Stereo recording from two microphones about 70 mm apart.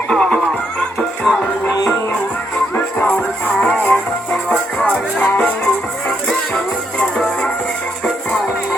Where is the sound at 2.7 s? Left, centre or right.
Left.